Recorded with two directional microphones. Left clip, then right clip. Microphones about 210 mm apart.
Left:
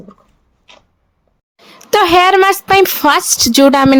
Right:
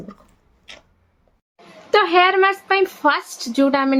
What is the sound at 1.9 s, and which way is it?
A woman's voice, 55° left (ahead or behind).